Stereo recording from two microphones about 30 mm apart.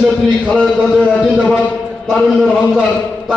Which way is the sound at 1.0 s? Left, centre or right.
Left.